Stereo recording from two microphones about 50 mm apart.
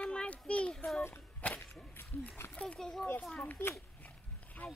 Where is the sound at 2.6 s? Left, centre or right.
Centre.